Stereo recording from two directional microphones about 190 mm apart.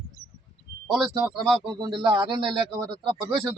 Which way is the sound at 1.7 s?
25° right (ahead or behind).